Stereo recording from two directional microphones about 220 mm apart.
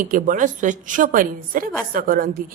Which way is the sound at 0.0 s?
40° right (ahead or behind).